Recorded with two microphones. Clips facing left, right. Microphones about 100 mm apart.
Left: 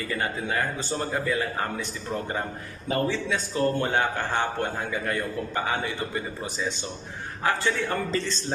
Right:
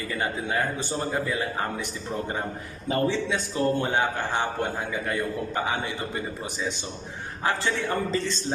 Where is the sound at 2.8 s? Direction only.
20° right (ahead or behind).